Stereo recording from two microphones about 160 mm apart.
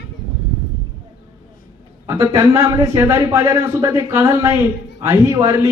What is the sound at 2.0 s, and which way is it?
A man's voice, 20° right (ahead or behind).